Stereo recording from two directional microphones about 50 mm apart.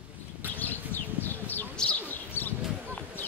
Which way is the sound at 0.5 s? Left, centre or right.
Left.